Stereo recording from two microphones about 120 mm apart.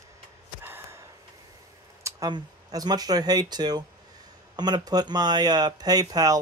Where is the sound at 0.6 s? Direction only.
20° right (ahead or behind).